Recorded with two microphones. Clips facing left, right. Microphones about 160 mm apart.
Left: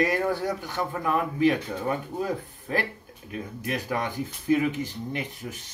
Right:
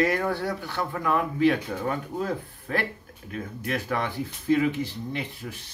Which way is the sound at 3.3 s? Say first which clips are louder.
Even; 15° left (ahead or behind).